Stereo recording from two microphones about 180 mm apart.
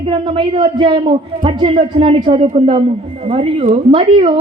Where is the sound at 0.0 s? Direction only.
30° right (ahead or behind).